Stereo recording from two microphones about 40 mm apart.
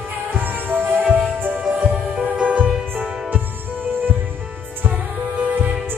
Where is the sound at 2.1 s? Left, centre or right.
Right.